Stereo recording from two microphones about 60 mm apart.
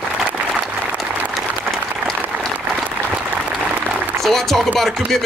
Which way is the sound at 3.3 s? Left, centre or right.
Centre.